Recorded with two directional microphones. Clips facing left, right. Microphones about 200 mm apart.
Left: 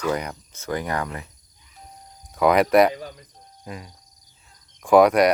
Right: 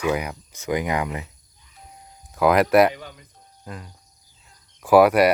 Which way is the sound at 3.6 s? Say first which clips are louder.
Left 1 dB; 10° left (ahead or behind).